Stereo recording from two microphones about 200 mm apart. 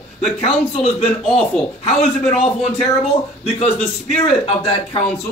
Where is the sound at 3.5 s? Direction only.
30° left (ahead or behind).